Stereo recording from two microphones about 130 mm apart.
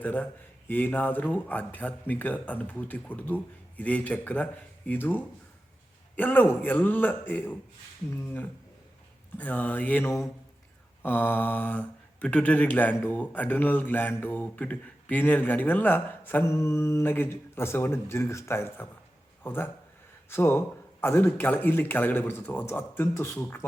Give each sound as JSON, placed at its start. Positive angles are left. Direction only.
{"t": 0.0, "sound": "speech", "side_deg": 10}